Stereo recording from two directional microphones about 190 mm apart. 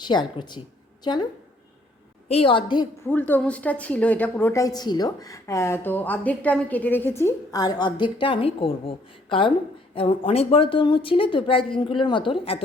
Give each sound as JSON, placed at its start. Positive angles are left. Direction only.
{"t": 0.0, "sound": "speech", "side_deg": 25}
{"t": 3.1, "sound": "a woman's voice", "side_deg": 10}